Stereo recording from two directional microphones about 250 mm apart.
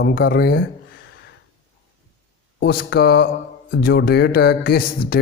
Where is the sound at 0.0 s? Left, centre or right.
Left.